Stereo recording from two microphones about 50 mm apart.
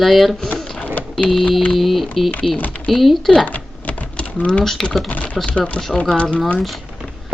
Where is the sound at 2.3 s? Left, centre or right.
Left.